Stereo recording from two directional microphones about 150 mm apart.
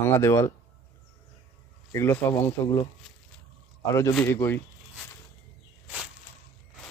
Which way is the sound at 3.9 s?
20° left (ahead or behind).